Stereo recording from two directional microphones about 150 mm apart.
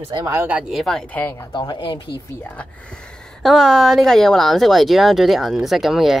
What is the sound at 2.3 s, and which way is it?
Speech, 15° left (ahead or behind).